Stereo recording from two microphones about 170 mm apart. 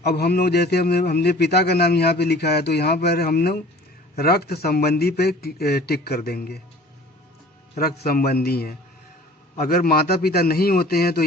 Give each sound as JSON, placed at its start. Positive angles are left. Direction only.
{"t": 0.0, "sound": "a man's voice", "side_deg": 70}
{"t": 7.8, "sound": "a man's voice", "side_deg": 60}